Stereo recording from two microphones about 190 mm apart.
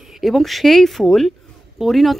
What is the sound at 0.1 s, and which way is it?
A woman's voice, centre (ahead or behind).